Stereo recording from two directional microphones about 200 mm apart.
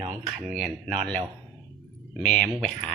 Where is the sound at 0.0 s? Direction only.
20° right (ahead or behind).